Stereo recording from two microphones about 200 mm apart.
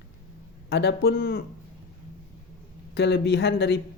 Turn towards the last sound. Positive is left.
turn(degrees=55)  # may be behind; listen again after turning